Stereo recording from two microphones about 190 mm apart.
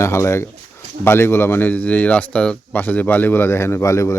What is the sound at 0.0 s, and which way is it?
Speech, 15° left (ahead or behind).